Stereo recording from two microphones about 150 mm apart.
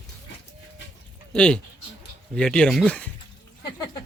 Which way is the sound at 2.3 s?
5° left (ahead or behind).